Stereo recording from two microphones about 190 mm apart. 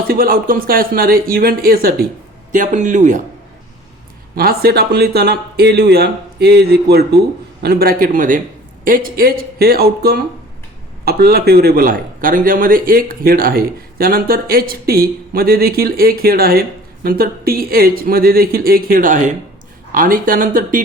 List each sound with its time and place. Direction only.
0.1 s a man's voice: 50° right (ahead or behind)
2.5 s speech: 40° right (ahead or behind)
4.4 s a man's voice: 55° right (ahead or behind)